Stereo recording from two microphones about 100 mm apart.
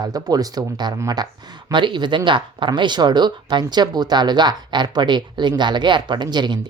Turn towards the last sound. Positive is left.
turn(degrees=-45)  # may be behind; listen again after turning